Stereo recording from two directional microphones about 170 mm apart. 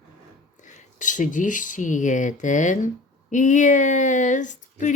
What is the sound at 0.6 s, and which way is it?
Speech, 50° left (ahead or behind).